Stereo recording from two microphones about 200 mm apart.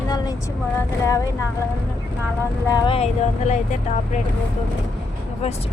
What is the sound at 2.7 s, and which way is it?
Speech, 25° left (ahead or behind).